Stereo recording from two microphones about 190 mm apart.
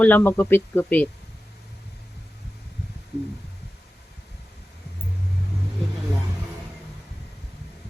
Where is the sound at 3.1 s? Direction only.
60° left (ahead or behind).